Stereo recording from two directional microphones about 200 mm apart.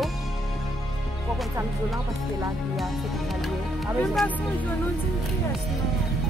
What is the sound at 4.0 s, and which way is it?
Speech, centre (ahead or behind).